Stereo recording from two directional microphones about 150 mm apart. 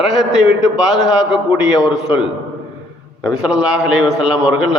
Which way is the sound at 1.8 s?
5° right (ahead or behind).